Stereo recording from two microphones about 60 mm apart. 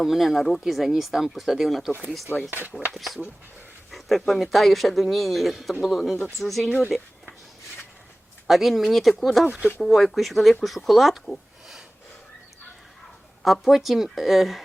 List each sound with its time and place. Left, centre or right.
0.0 s speech: centre
2.3 s speech: right
2.7 s speech: centre
8.4 s speech: centre
13.4 s speech: centre